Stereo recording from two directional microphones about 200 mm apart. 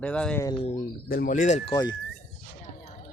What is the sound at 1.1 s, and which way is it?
Speech, 45° left (ahead or behind).